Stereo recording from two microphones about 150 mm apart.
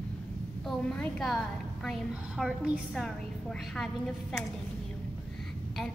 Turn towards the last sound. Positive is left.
turn(degrees=0)  # may be behind; listen again after turning